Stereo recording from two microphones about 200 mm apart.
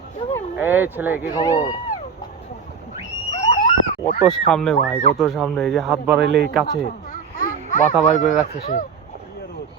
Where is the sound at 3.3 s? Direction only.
30° left (ahead or behind).